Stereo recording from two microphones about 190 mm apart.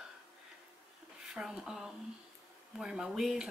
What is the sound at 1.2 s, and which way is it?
Speech, 5° right (ahead or behind).